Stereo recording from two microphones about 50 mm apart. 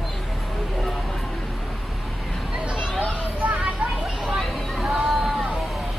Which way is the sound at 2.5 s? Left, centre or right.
Centre.